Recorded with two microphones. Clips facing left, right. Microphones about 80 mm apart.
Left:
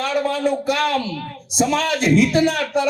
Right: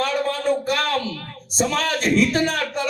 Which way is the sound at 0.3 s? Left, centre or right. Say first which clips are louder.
Left 2 dB; right.